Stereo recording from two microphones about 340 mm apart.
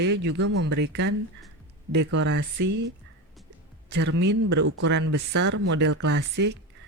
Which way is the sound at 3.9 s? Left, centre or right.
Right.